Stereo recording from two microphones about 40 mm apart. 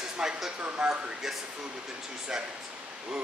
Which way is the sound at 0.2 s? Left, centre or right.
Centre.